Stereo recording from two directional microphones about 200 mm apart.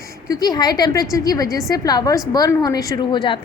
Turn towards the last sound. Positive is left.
turn(degrees=20)  # may be behind; listen again after turning